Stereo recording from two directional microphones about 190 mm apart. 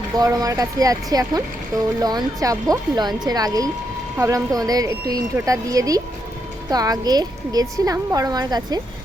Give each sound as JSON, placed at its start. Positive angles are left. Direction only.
{"t": 0.2, "sound": "a woman's voice", "side_deg": -20}